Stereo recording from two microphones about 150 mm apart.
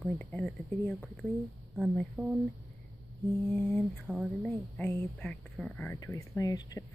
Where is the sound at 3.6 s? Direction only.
5° left (ahead or behind).